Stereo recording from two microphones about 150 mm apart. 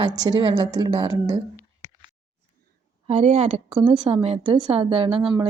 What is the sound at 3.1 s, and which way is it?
Speech, 45° right (ahead or behind).